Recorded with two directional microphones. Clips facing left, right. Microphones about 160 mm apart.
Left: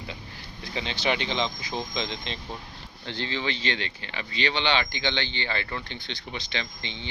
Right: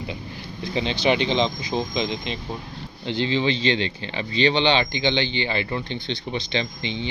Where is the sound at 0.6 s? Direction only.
20° right (ahead or behind).